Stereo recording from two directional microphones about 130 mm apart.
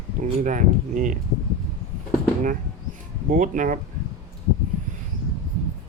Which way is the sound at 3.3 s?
85° right.